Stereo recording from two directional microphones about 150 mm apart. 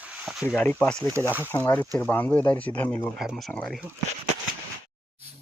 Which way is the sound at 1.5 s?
25° left (ahead or behind).